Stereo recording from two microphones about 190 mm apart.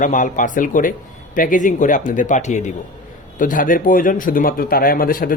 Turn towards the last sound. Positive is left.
turn(degrees=50)  # may be behind; listen again after turning